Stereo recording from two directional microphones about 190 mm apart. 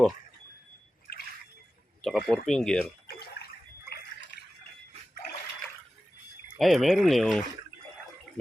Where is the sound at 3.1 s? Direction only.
55° left (ahead or behind).